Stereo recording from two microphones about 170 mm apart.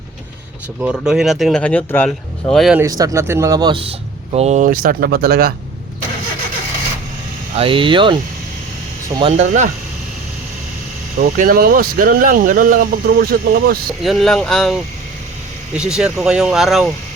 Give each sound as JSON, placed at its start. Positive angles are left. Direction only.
{"t": 0.8, "sound": "speech", "side_deg": -5}
{"t": 3.0, "sound": "speech", "side_deg": -15}
{"t": 4.7, "sound": "speech", "side_deg": -60}
{"t": 7.5, "sound": "speech", "side_deg": -30}
{"t": 9.3, "sound": "speech", "side_deg": -45}
{"t": 11.2, "sound": "speech", "side_deg": -60}
{"t": 14.0, "sound": "speech", "side_deg": 0}